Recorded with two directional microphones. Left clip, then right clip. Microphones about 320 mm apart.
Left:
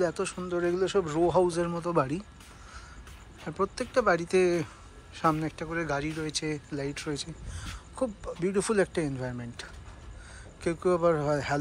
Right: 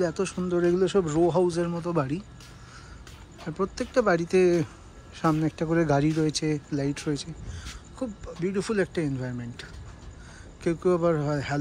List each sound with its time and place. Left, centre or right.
0.0 s speech: centre
3.4 s speech: centre